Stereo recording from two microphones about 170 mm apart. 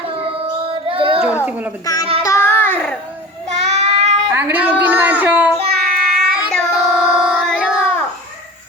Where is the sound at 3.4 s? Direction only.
40° right (ahead or behind).